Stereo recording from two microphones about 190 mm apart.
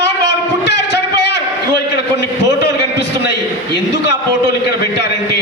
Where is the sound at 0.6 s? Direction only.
65° left (ahead or behind).